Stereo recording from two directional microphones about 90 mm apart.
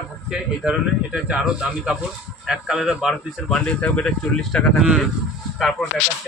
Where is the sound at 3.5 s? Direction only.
10° left (ahead or behind).